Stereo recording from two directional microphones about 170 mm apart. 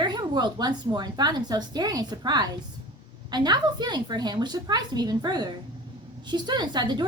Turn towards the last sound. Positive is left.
turn(degrees=-25)  # may be behind; listen again after turning